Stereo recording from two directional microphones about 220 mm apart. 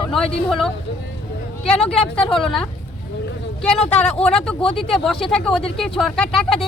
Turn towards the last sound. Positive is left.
turn(degrees=0)  # may be behind; listen again after turning